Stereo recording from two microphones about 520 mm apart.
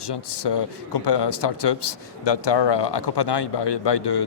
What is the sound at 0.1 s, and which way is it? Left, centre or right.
A man's voice, left.